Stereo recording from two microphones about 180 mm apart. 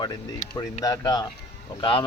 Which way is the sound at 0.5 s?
20° left (ahead or behind).